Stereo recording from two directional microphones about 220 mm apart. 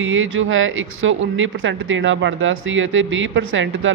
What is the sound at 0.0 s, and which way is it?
Speech, 65° right (ahead or behind).